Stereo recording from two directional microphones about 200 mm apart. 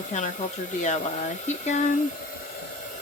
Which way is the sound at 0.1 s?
35° left (ahead or behind).